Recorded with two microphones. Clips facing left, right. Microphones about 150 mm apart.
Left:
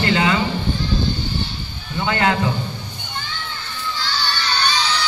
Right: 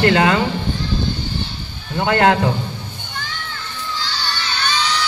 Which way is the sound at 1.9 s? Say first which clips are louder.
Right 5 dB; 55° right (ahead or behind).